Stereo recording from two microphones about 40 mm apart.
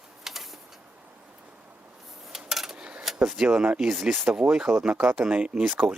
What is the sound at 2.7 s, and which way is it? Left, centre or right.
Cutlery, right.